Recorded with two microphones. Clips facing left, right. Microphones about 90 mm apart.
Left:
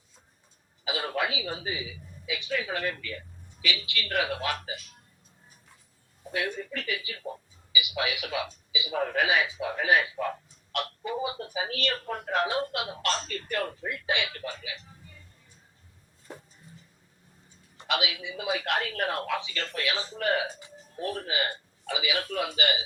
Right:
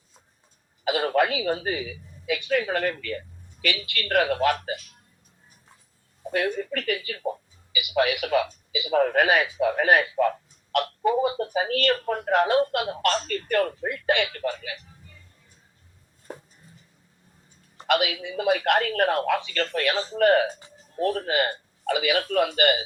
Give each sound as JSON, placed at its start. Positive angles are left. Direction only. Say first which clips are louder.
{"t": 0.9, "sound": "a woman's voice", "louder": "right 8 dB", "side_deg": -55}
{"t": 6.3, "sound": "a man's voice", "louder": "right 6 dB", "side_deg": -50}
{"t": 17.8, "sound": "speech", "louder": "right 7 dB", "side_deg": -55}